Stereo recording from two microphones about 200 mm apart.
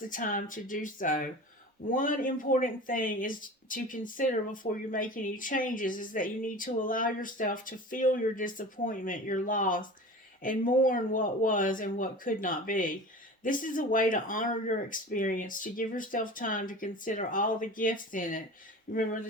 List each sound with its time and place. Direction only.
0.0 s speech: 40° left (ahead or behind)